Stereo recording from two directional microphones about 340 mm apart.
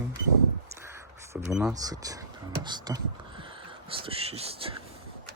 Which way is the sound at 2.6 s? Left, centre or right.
Centre.